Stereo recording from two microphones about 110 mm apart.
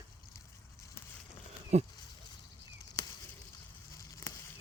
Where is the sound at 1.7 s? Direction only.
90° right.